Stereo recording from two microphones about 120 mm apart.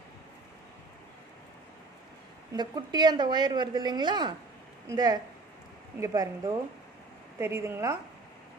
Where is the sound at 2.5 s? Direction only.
35° right (ahead or behind).